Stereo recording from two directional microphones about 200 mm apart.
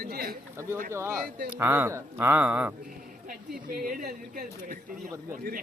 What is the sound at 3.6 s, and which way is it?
Speech, 45° right (ahead or behind).